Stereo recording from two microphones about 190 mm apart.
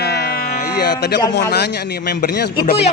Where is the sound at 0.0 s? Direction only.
60° left (ahead or behind).